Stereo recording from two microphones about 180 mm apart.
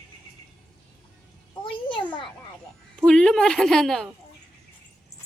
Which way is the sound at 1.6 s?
25° left (ahead or behind).